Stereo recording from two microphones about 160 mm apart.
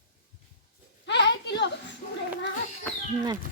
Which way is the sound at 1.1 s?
90° left.